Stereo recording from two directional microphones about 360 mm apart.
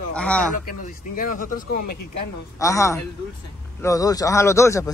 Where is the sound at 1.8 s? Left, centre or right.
Left.